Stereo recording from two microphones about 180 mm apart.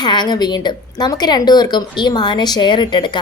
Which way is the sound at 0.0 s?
25° left (ahead or behind).